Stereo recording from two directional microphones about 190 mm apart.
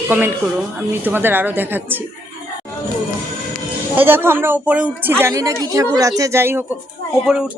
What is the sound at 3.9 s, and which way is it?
Speech, 10° right (ahead or behind).